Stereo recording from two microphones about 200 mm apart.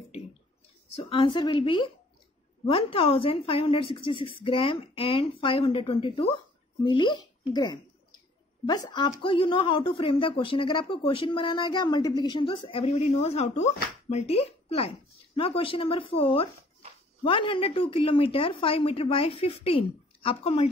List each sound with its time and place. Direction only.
0.8 s speech: 30° left (ahead or behind)